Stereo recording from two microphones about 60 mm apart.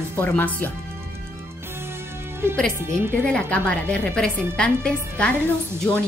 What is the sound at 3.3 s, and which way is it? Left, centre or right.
A woman's voice, centre.